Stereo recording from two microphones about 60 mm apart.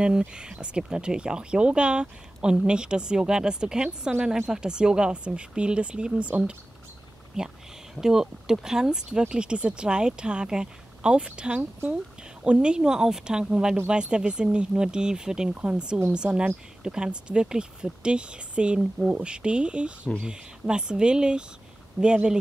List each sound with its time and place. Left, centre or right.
0.3 s speech: centre